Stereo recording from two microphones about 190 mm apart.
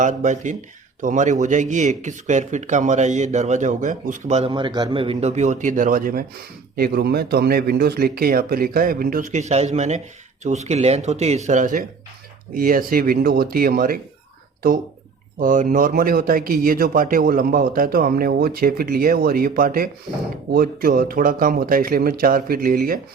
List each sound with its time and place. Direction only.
0.0 s a man's voice: 40° right (ahead or behind)